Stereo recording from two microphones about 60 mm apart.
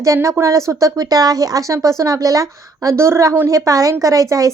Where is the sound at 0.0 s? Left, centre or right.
Right.